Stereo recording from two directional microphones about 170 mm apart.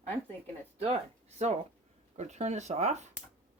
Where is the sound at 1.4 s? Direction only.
40° right (ahead or behind).